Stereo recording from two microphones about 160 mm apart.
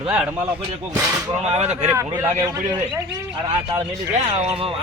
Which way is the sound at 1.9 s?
15° right (ahead or behind).